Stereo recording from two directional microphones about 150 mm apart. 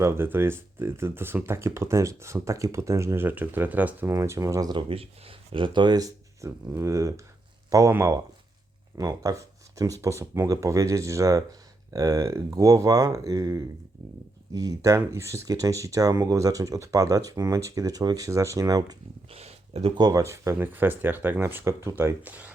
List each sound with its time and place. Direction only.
0.0 s speech: 15° right (ahead or behind)
19.3 s a sound: 40° right (ahead or behind)
20.0 s speech: 25° right (ahead or behind)